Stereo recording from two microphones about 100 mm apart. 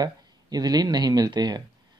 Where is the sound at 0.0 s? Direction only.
40° right (ahead or behind).